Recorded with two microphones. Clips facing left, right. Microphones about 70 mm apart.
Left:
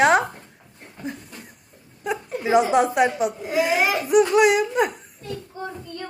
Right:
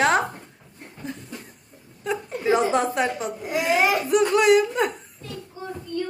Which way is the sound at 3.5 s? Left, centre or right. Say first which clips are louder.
Right 1 dB; centre.